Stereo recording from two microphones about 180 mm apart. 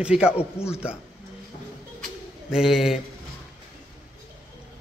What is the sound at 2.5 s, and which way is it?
Speech, 5° right (ahead or behind).